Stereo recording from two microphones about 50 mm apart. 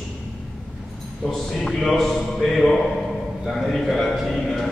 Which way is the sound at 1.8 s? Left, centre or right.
Centre.